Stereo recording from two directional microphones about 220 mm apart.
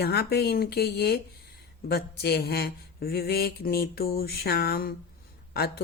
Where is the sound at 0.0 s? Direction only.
45° left (ahead or behind).